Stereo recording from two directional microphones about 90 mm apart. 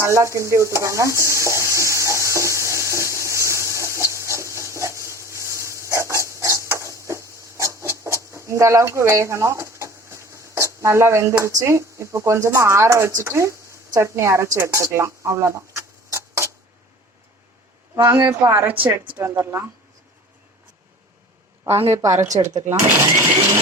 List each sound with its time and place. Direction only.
0.0 s stir: 30° right (ahead or behind)
7.0 s a sound: 35° right (ahead or behind)
11.3 s speech: 35° right (ahead or behind)
18.0 s speech: 25° right (ahead or behind)
21.8 s speech: 35° right (ahead or behind)